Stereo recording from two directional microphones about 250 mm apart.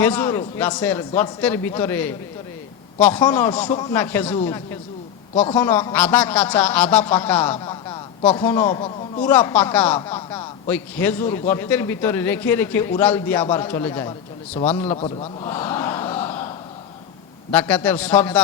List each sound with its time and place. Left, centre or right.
0.0 s a man's voice: centre
5.5 s a man's voice: centre
7.5 s a sound: centre
8.4 s a man's voice: centre
9.3 s a man's voice: centre
14.8 s a man's voice: left
16.2 s a sound: centre
17.5 s a man's voice: centre